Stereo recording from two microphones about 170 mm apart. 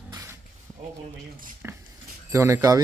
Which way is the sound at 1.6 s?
10° right (ahead or behind).